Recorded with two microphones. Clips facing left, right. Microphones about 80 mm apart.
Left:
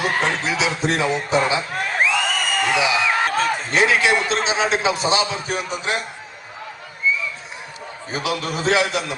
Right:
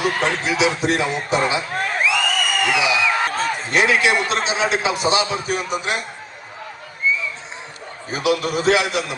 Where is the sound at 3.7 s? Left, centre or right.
Left.